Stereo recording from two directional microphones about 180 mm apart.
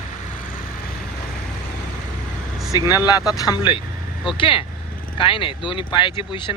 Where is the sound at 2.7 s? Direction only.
20° left (ahead or behind).